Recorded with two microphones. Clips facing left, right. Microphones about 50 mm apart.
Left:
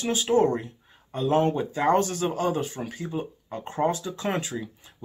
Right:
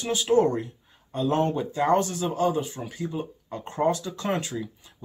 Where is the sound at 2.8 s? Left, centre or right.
Left.